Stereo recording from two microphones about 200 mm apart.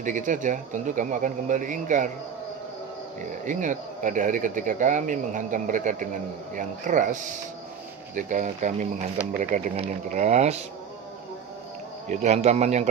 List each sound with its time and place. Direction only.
0.0 s speech: 40° right (ahead or behind)
3.4 s speech: 40° right (ahead or behind)
12.0 s speech: 35° right (ahead or behind)